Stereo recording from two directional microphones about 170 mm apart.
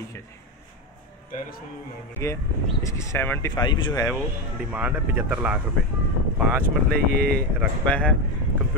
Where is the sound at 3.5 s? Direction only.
25° left (ahead or behind).